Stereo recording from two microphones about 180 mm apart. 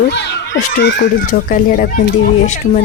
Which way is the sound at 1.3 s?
50° left (ahead or behind).